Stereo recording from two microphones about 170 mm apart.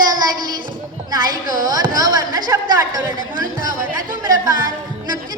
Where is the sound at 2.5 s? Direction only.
25° right (ahead or behind).